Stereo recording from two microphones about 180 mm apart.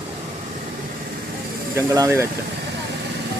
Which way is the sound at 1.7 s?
15° right (ahead or behind).